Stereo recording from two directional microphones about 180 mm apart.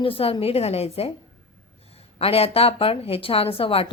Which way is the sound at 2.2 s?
35° left (ahead or behind).